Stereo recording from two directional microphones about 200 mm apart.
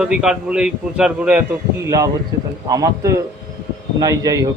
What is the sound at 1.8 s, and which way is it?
A man's voice, 15° right (ahead or behind).